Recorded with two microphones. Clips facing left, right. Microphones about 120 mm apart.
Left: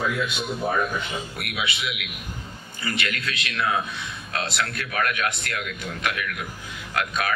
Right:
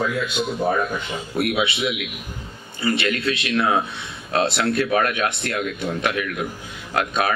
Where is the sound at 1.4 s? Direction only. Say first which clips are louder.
Right 13 dB; 25° right (ahead or behind).